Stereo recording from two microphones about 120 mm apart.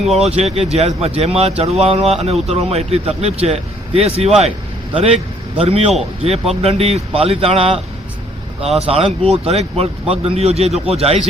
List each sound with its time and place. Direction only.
0.2 s speech: 65° right (ahead or behind)
8.8 s speech: 55° right (ahead or behind)